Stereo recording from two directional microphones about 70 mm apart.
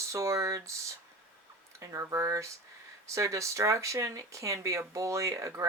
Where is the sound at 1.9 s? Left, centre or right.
Right.